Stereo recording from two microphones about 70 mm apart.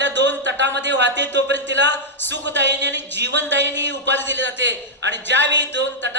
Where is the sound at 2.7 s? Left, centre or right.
Left.